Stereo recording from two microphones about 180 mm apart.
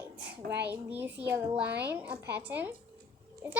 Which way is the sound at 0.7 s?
10° right (ahead or behind).